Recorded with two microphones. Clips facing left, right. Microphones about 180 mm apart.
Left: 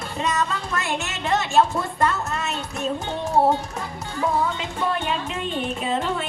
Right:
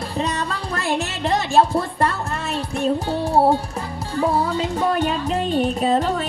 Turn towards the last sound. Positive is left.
turn(degrees=-40)  # may be behind; listen again after turning